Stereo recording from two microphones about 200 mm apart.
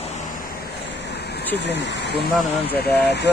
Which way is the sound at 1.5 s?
60° left (ahead or behind).